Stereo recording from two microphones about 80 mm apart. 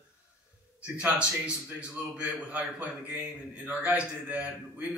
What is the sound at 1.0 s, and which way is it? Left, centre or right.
A man's voice, centre.